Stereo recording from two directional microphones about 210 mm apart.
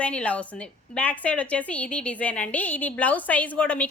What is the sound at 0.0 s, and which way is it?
A woman's voice, 5° left (ahead or behind).